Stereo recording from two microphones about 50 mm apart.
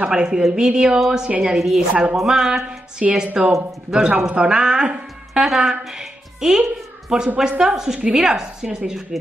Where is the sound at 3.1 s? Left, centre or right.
Right.